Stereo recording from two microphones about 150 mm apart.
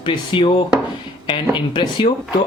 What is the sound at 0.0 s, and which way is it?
Speech, 35° left (ahead or behind).